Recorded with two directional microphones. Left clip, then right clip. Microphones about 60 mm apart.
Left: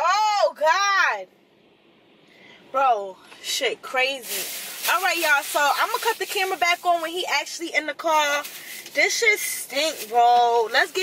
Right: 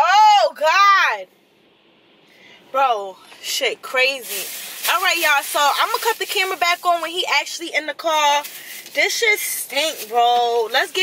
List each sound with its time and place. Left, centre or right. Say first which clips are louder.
0.3 s a sound: right 5 dB; centre
2.7 s speech: right 2 dB; centre
4.2 s speech: right 2 dB; left
5.0 s speech: right 5 dB; centre
6.6 s a woman's voice: right 2 dB; centre
7.7 s speech: right 1 dB; centre